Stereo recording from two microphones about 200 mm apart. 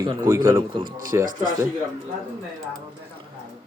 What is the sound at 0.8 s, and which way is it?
Speech, 45° right (ahead or behind).